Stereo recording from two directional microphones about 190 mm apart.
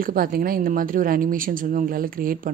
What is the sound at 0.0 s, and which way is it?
Speech, 50° right (ahead or behind).